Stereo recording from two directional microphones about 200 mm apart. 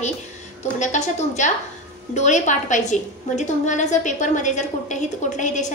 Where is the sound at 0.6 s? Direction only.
35° left (ahead or behind).